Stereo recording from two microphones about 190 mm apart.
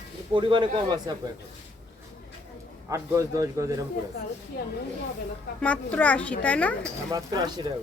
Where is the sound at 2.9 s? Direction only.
15° right (ahead or behind).